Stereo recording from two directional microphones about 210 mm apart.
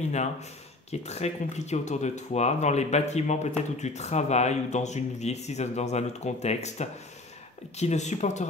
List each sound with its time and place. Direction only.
1.0 s speech: 30° left (ahead or behind)